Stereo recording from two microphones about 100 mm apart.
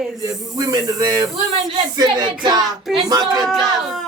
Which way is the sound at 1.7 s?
45° right (ahead or behind).